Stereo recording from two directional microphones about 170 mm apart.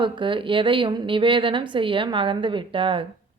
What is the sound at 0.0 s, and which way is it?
A woman's voice, 30° right (ahead or behind).